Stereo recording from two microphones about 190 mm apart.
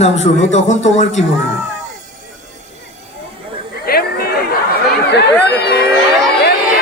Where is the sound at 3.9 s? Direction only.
55° left (ahead or behind).